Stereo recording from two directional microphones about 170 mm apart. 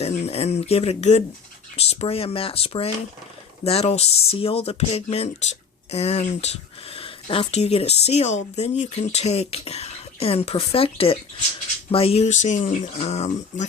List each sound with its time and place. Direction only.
0.0 s speech: 40° left (ahead or behind)